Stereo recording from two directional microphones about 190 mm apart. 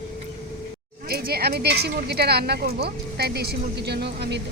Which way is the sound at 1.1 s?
55° right (ahead or behind).